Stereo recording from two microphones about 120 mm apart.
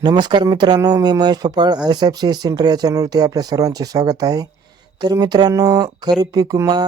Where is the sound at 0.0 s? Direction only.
35° right (ahead or behind).